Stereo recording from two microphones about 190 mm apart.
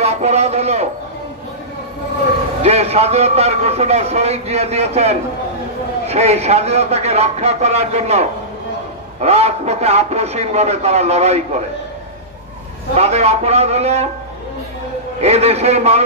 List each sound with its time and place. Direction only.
0.0 s a sound: 35° right (ahead or behind)
2.6 s a man's voice: 35° right (ahead or behind)
12.9 s a man's voice: 35° right (ahead or behind)
15.1 s a man's voice: 35° right (ahead or behind)